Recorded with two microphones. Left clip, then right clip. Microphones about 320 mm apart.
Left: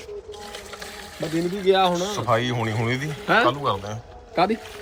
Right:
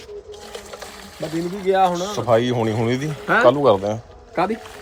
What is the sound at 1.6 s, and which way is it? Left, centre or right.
Speech, centre.